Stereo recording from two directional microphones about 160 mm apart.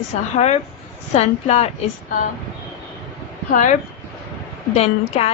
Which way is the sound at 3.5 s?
55° left (ahead or behind).